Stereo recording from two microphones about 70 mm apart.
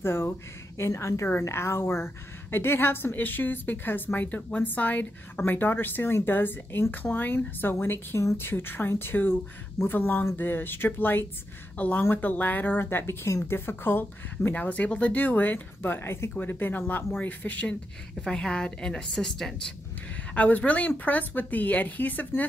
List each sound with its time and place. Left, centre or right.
0.0 s a woman's voice: left
14.5 s a woman's voice: left
16.3 s a woman's voice: left
18.2 s a woman's voice: centre
20.3 s a woman's voice: left